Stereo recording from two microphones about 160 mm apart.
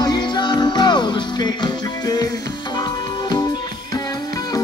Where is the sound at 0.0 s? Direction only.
25° left (ahead or behind).